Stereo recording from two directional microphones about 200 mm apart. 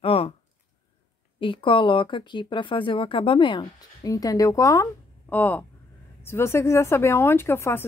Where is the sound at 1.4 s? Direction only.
25° left (ahead or behind).